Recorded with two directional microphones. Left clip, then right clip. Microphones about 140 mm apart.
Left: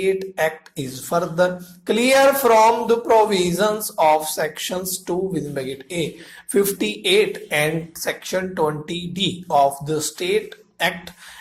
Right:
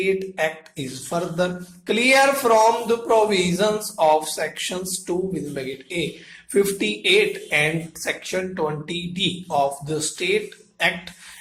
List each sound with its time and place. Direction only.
0.0 s speech: 35° left (ahead or behind)